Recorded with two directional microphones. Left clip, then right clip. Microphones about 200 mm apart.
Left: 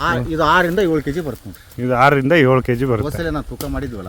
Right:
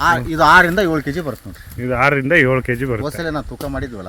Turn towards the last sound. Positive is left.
turn(degrees=-15)  # may be behind; listen again after turning